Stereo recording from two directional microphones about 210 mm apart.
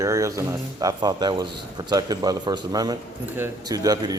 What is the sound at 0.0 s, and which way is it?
A man's voice, 15° right (ahead or behind).